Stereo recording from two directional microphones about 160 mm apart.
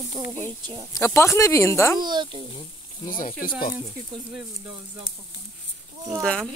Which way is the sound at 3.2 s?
60° left (ahead or behind).